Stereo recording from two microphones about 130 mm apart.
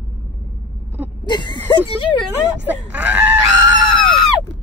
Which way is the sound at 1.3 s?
35° left (ahead or behind).